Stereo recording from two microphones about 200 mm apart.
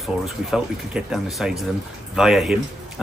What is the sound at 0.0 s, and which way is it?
Speech, centre (ahead or behind).